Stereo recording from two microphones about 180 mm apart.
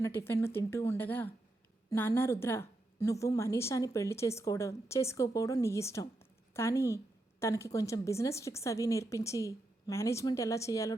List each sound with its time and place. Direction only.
0.0 s a woman's voice: 15° left (ahead or behind)